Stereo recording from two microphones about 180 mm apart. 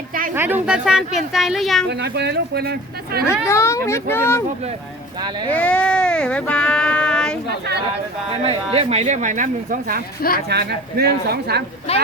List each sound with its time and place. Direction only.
0.3 s speech: 10° right (ahead or behind)
1.9 s speech: 70° right (ahead or behind)
3.4 s speech: 15° left (ahead or behind)
5.5 s a sound: 5° left (ahead or behind)
8.7 s speech: 35° right (ahead or behind)
10.5 s speech: 65° right (ahead or behind)
11.9 s speech: 35° left (ahead or behind)